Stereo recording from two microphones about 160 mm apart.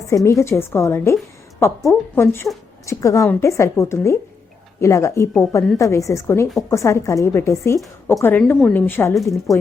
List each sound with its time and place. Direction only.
0.1 s a woman's voice: 20° left (ahead or behind)